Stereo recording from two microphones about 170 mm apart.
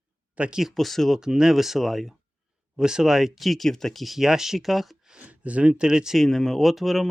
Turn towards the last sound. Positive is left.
turn(degrees=0)  # may be behind; listen again after turning